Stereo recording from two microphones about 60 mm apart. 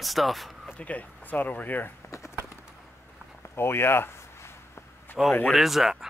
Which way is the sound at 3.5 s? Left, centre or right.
Left.